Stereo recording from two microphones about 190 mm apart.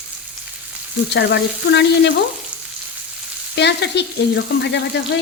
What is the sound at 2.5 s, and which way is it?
Frying, 5° right (ahead or behind).